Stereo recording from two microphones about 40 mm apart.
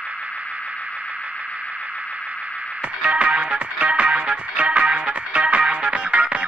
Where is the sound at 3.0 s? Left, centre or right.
Right.